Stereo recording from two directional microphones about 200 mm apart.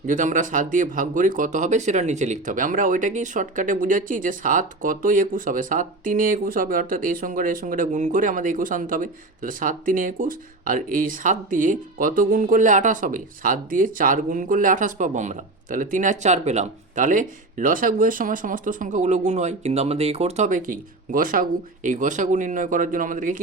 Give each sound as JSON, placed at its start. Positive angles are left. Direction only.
{"t": 0.1, "sound": "speech", "side_deg": -40}